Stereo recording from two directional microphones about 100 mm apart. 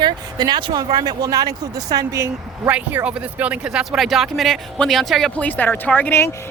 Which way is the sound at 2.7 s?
15° right (ahead or behind).